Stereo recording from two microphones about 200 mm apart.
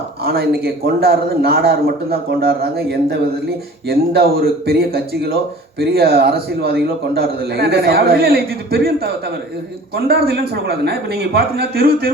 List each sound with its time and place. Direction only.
0.3 s a man's voice: 50° right (ahead or behind)